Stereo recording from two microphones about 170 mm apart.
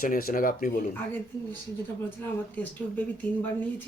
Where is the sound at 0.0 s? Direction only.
60° left (ahead or behind).